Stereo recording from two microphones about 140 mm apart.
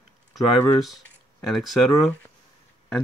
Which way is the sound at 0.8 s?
Centre (ahead or behind).